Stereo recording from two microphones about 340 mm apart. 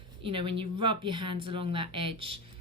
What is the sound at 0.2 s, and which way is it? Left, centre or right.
Speech, centre.